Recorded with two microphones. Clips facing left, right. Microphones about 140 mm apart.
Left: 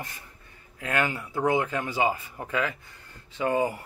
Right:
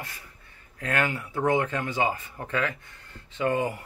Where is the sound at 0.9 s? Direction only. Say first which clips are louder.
Even; 10° left (ahead or behind).